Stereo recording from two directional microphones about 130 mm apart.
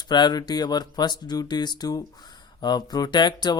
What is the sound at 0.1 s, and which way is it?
A man's voice, 35° left (ahead or behind).